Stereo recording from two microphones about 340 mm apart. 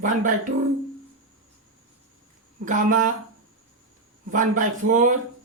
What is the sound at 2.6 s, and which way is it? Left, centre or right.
Speech, right.